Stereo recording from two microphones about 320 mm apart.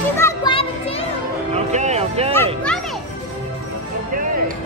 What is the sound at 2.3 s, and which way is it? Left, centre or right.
Music, centre.